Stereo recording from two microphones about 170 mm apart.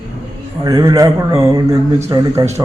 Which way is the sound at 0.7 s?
20° right (ahead or behind).